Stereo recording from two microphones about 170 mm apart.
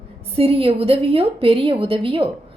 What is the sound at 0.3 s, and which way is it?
A woman's voice, 35° right (ahead or behind).